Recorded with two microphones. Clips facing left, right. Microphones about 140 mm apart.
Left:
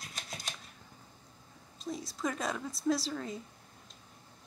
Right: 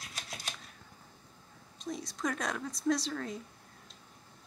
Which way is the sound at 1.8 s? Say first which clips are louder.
Even; centre (ahead or behind).